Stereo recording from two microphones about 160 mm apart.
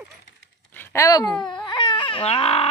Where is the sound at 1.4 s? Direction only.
30° left (ahead or behind).